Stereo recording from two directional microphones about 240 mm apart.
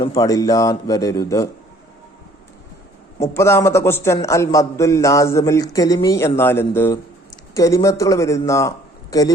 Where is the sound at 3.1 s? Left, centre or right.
Centre.